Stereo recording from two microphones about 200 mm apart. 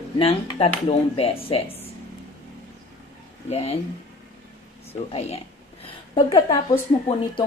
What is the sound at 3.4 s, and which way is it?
Speech, 30° left (ahead or behind).